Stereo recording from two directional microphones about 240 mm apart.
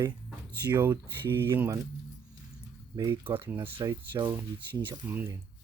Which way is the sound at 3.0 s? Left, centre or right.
Centre.